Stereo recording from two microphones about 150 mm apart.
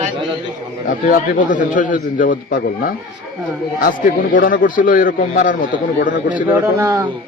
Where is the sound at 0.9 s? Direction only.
65° left (ahead or behind).